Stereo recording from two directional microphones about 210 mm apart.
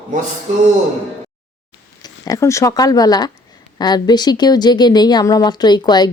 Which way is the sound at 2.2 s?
15° left (ahead or behind).